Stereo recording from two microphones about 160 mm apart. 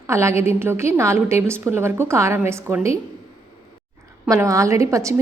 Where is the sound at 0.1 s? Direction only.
15° right (ahead or behind).